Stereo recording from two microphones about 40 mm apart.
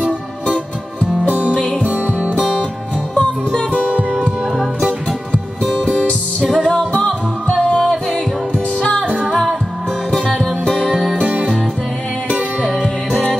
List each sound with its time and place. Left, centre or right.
1.5 s music: left
3.2 s music: left
6.4 s music: centre
8.8 s music: left
9.3 s music: centre
12.3 s music: left